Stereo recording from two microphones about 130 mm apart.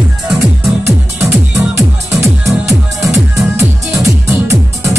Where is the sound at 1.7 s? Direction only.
20° right (ahead or behind).